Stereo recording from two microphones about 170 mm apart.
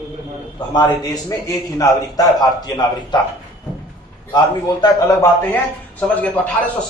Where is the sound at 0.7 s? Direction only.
25° left (ahead or behind).